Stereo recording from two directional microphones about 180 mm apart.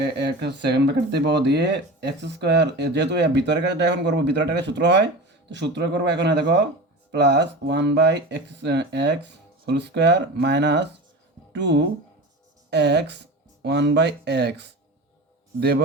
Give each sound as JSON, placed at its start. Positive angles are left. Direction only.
{"t": 0.0, "sound": "speech", "side_deg": -70}